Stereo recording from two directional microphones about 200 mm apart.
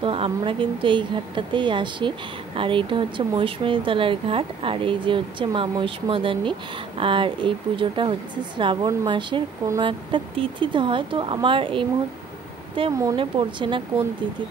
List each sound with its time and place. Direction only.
0.0 s a woman's voice: 25° right (ahead or behind)
12.9 s a woman's voice: 20° right (ahead or behind)